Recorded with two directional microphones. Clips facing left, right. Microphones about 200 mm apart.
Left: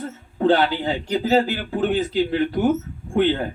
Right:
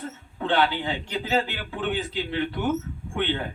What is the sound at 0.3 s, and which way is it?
Speech, 40° left (ahead or behind).